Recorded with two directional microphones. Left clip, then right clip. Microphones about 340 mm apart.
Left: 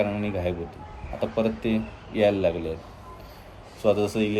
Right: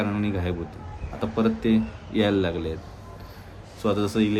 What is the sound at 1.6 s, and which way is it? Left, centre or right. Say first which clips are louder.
Speech: right 3 dB; right.